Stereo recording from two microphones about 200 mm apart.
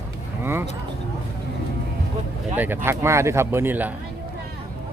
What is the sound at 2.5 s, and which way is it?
Speech, 10° right (ahead or behind).